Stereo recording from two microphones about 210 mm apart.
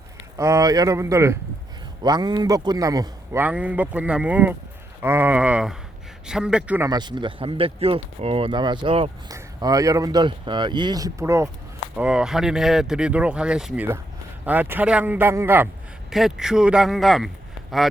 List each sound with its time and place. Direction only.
0.3 s a man's voice: 15° right (ahead or behind)